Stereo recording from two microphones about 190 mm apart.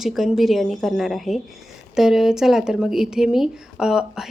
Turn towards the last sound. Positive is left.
turn(degrees=-5)  # may be behind; listen again after turning